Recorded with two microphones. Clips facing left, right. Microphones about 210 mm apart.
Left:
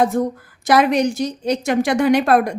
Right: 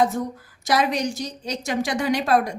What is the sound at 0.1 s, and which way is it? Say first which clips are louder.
A woman's voice: left 7 dB; 55° left (ahead or behind).